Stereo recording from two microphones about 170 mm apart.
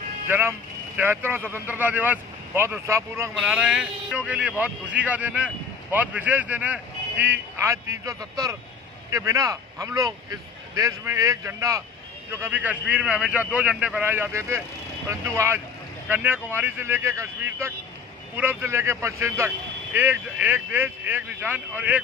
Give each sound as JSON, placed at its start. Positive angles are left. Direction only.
{"t": 0.3, "sound": "speech", "side_deg": -10}